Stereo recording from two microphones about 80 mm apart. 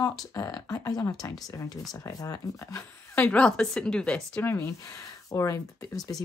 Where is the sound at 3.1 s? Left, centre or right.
Left.